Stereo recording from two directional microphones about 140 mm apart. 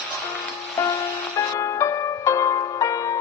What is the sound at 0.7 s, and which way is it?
Music, 25° left (ahead or behind).